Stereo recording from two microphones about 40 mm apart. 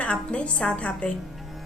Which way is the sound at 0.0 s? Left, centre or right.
Left.